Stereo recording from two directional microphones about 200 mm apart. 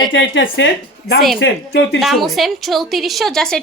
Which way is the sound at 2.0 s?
Centre (ahead or behind).